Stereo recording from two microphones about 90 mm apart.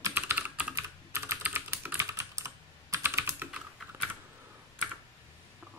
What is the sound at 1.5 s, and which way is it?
Typing, 20° right (ahead or behind).